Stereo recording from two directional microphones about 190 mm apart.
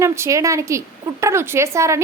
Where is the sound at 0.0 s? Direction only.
15° right (ahead or behind).